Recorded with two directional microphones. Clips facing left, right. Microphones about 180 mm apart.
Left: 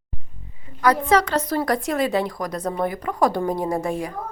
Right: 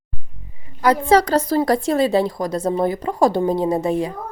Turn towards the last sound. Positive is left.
turn(degrees=-25)  # may be behind; listen again after turning